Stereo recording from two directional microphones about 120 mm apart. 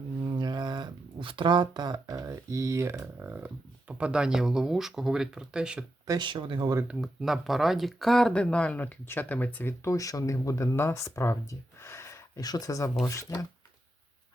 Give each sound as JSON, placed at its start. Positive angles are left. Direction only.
{"t": 0.3, "sound": "speech", "side_deg": -40}
{"t": 6.1, "sound": "speech", "side_deg": -40}
{"t": 6.8, "sound": "speech", "side_deg": -5}